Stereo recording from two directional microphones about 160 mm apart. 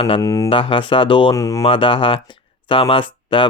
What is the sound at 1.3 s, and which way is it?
Speech, 20° left (ahead or behind).